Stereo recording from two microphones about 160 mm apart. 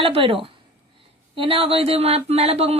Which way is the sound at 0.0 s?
35° right (ahead or behind).